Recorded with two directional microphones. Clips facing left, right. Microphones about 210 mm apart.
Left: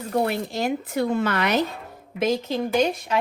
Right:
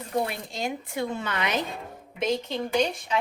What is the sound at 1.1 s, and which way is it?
Speech, 65° left (ahead or behind).